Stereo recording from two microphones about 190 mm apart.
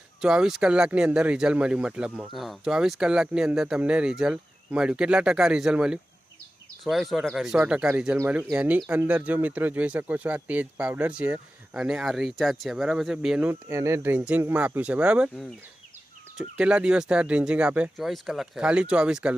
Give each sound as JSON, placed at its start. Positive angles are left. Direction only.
{"t": 0.2, "sound": "speech", "side_deg": -5}